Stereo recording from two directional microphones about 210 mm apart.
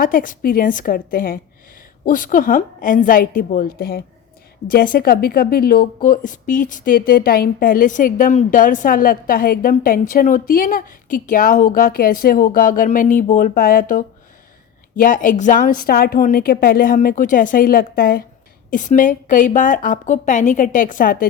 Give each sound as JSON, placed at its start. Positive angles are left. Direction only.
{"t": 0.0, "sound": "a woman's voice", "side_deg": 40}